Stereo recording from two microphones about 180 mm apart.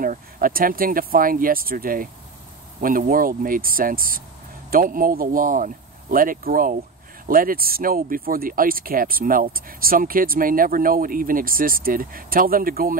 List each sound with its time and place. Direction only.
0.0 s speech: 50° right (ahead or behind)